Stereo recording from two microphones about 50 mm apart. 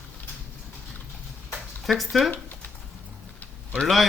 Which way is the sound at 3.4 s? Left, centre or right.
Left.